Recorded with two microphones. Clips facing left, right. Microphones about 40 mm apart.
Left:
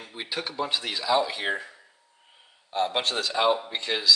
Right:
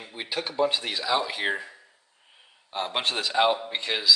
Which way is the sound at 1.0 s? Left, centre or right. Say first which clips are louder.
Left 2 dB; centre.